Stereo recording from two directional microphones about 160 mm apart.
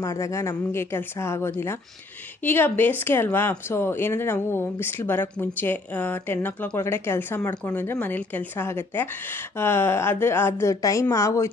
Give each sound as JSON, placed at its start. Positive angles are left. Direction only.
{"t": 0.0, "sound": "speech", "side_deg": 20}